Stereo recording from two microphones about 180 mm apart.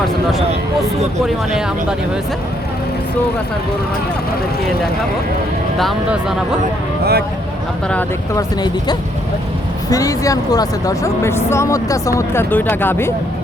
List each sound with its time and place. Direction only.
5.8 s speech: centre (ahead or behind)
7.0 s speech: 60° right (ahead or behind)
8.4 s speech: 25° left (ahead or behind)